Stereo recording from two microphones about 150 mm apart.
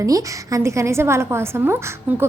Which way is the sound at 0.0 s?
20° right (ahead or behind).